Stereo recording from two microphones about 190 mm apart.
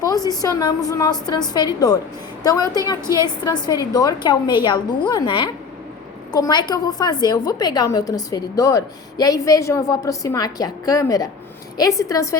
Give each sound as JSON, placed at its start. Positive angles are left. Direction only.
{"t": 0.0, "sound": "a woman's voice", "side_deg": 20}